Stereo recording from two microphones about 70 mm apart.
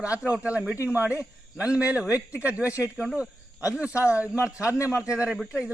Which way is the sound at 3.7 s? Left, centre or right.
Centre.